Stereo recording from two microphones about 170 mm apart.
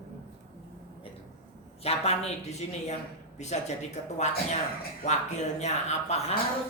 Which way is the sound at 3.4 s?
40° left (ahead or behind).